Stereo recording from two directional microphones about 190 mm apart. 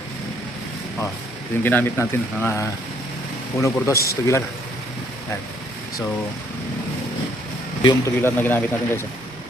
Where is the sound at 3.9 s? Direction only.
55° left (ahead or behind).